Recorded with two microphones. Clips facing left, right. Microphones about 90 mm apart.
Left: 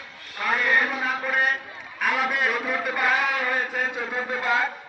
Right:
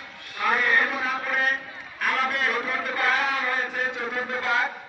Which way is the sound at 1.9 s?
5° left (ahead or behind).